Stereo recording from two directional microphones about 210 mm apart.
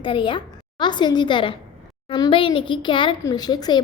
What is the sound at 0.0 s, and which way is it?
A woman's voice, 20° left (ahead or behind).